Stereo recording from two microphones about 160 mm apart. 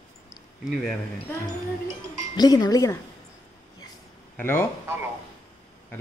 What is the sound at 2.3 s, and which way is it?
Speech, 25° left (ahead or behind).